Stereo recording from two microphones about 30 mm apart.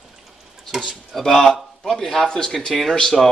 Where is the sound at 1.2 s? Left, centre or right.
Centre.